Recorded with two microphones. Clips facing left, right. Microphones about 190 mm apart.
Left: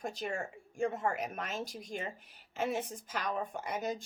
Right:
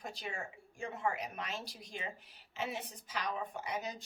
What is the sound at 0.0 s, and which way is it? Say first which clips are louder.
Speech: left 6 dB; 50° left (ahead or behind).